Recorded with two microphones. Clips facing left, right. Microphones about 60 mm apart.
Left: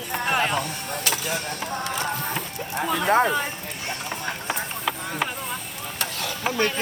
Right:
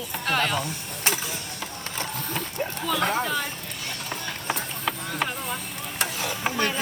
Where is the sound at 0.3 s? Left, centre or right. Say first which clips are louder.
Left 1 dB; centre.